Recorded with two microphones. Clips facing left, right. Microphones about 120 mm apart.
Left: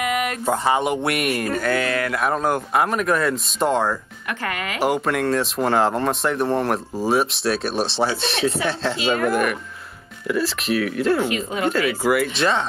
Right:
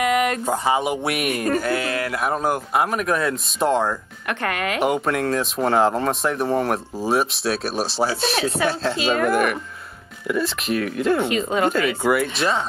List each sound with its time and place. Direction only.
0.5 s speech: 5° right (ahead or behind)
4.3 s speech: 65° right (ahead or behind)
4.8 s speech: centre (ahead or behind)
8.9 s speech: 25° right (ahead or behind)
9.3 s speech: centre (ahead or behind)
11.2 s speech: 25° right (ahead or behind)
12.0 s speech: centre (ahead or behind)